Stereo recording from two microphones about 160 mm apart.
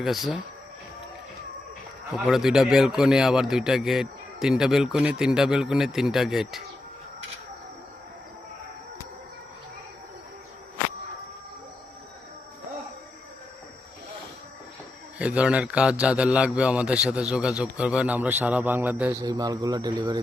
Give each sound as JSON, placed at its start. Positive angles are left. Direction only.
{"t": 0.0, "sound": "a man's voice", "side_deg": 0}
{"t": 2.1, "sound": "a man's voice", "side_deg": 0}
{"t": 15.2, "sound": "a man's voice", "side_deg": -5}
{"t": 19.2, "sound": "speech", "side_deg": -25}